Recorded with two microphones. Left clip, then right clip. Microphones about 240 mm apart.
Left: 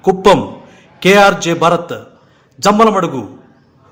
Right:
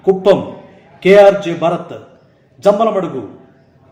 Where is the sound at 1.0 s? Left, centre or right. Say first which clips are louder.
Right 2 dB; left.